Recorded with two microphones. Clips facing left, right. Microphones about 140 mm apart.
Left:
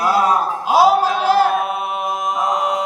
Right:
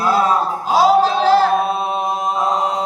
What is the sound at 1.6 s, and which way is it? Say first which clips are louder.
Chant: right 3 dB; 30° right (ahead or behind).